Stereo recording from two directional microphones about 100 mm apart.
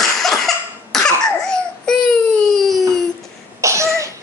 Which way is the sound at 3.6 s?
30° right (ahead or behind).